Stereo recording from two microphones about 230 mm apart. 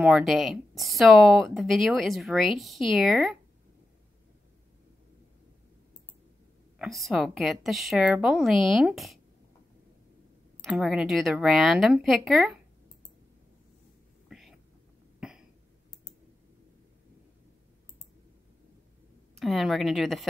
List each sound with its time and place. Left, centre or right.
0.0 s speech: centre
6.8 s speech: centre
10.6 s speech: centre
14.3 s whispering: centre
15.1 s cough: centre
19.3 s speech: centre